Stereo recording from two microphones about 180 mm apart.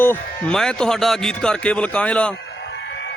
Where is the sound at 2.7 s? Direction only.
80° left.